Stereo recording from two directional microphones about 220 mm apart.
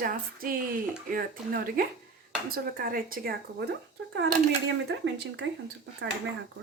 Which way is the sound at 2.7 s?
40° right (ahead or behind).